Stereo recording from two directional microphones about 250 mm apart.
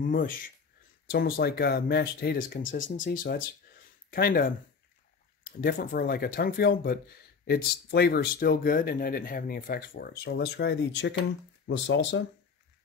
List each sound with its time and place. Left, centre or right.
0.0 s speech: left